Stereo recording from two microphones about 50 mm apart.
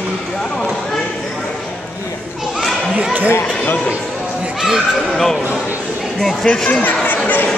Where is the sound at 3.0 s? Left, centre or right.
Right.